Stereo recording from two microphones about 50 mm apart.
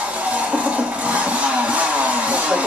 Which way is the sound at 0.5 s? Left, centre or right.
Right.